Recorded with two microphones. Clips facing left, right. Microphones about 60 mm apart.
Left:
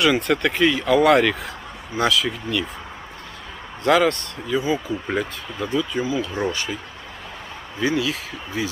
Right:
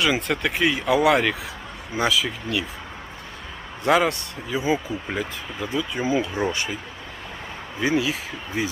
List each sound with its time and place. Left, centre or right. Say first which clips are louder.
0.0 s speech: left 4 dB; centre
3.8 s speech: left 2 dB; centre
5.0 s speech: left 3 dB; centre
6.0 s speech: right 5 dB; right
6.5 s speech: even; centre
7.8 s speech: even; right